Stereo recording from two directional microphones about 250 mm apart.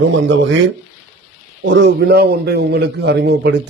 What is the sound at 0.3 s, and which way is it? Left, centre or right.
Speech, right.